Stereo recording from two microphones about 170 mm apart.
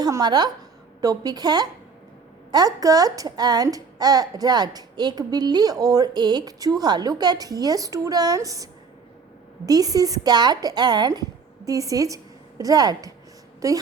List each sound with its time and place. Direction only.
0.0 s a woman's voice: 25° right (ahead or behind)